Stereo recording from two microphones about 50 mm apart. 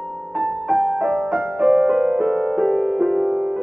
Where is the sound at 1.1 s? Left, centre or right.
Centre.